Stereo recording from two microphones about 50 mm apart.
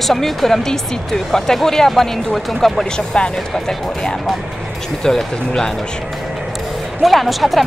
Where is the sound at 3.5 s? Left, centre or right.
Centre.